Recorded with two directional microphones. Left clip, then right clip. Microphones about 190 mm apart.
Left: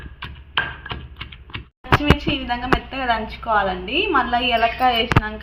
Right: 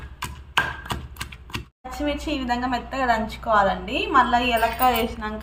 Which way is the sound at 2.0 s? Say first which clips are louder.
Left 6 dB; 15° left (ahead or behind).